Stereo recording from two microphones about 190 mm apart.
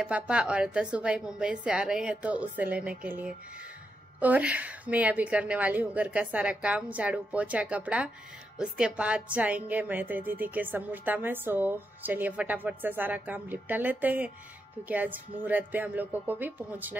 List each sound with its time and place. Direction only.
0.0 s a woman's voice: 5° right (ahead or behind)